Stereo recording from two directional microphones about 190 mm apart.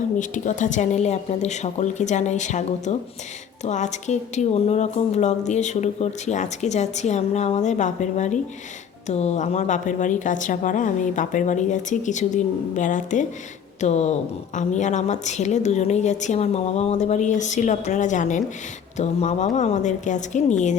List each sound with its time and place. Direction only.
0.2 s speech: 40° left (ahead or behind)